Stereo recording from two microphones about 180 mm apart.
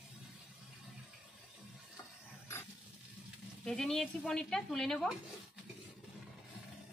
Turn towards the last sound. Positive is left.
turn(degrees=0)  # may be behind; listen again after turning